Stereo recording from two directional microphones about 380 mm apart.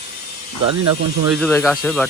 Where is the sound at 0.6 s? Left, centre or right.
Right.